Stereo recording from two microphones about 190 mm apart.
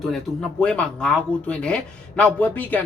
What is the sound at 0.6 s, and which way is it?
Speech, 5° left (ahead or behind).